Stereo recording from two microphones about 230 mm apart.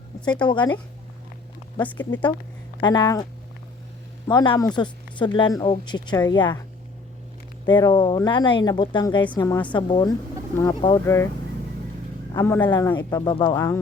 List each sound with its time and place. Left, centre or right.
0.4 s a woman's voice: centre
1.8 s speech: centre
2.8 s speech: centre
4.3 s a woman's voice: centre
7.7 s a woman's voice: centre
12.3 s speech: centre